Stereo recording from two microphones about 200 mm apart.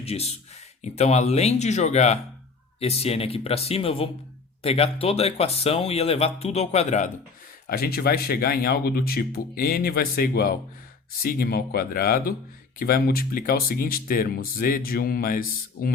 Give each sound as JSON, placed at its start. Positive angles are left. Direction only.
{"t": 0.0, "sound": "speech", "side_deg": 30}
{"t": 7.7, "sound": "speech", "side_deg": 50}